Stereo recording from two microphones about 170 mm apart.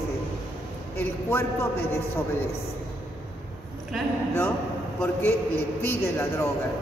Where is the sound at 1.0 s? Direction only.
10° left (ahead or behind).